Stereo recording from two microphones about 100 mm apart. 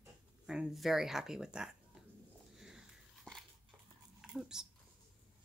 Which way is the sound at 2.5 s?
5° right (ahead or behind).